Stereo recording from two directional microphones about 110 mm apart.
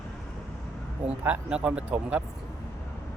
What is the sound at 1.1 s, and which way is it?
Speech, 10° right (ahead or behind).